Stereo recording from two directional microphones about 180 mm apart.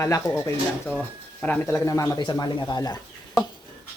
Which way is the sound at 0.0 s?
15° left (ahead or behind).